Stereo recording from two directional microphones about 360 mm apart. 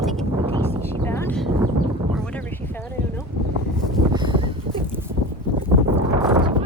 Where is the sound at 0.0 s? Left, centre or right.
Centre.